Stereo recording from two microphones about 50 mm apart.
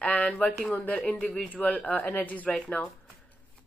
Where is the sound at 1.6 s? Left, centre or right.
Left.